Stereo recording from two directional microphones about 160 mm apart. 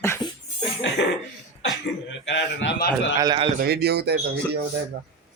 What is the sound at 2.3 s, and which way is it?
Speech, 90° left.